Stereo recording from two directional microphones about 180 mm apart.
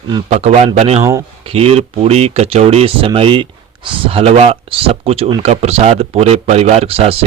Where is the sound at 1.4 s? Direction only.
35° right (ahead or behind).